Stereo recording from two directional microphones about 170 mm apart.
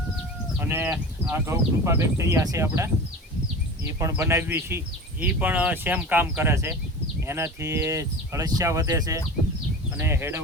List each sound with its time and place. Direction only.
0.7 s speech: 10° right (ahead or behind)
4.0 s speech: 15° right (ahead or behind)